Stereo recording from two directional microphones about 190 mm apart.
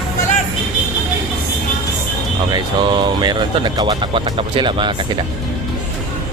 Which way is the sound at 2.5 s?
25° right (ahead or behind).